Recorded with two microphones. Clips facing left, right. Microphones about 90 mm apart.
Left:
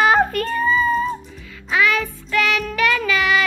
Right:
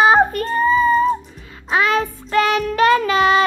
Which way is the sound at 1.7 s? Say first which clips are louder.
Right 2 dB; 35° right (ahead or behind).